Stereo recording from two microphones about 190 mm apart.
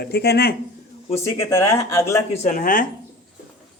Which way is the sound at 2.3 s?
40° left (ahead or behind).